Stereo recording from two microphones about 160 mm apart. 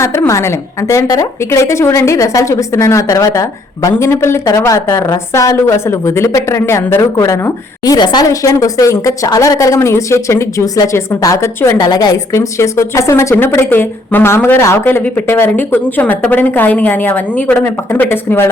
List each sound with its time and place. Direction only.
0.0 s a woman's voice: 20° left (ahead or behind)